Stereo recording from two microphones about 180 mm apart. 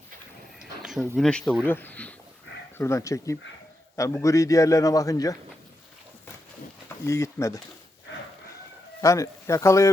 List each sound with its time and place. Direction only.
0.6 s a man's voice: centre (ahead or behind); by 5.4 s 20° left (ahead or behind)
6.8 s speech: 15° left (ahead or behind)
9.0 s a man's voice: 15° left (ahead or behind)